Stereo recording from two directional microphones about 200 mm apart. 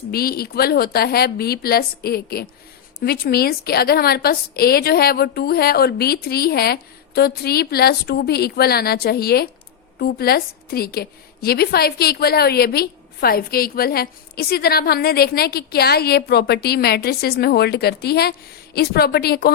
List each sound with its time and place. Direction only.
0.1 s a woman's voice: 50° left (ahead or behind)